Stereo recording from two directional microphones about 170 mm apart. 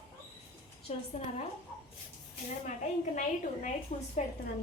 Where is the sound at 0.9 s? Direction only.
35° left (ahead or behind).